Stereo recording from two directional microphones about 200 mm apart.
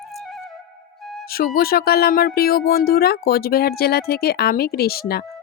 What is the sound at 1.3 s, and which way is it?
Speech, 50° left (ahead or behind).